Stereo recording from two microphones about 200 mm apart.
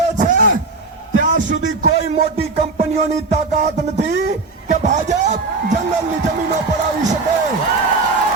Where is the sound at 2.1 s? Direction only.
30° right (ahead or behind).